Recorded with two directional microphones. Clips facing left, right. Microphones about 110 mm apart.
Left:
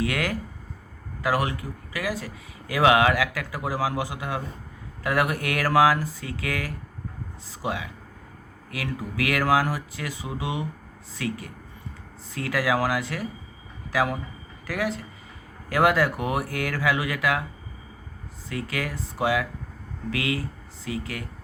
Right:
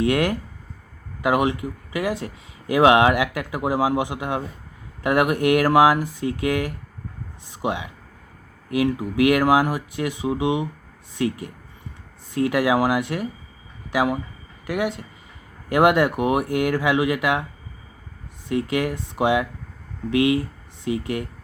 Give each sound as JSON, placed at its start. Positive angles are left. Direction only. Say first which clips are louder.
{"t": 0.0, "sound": "speech", "louder": "right 6 dB", "side_deg": -25}
{"t": 18.4, "sound": "speech", "louder": "right 8 dB", "side_deg": -20}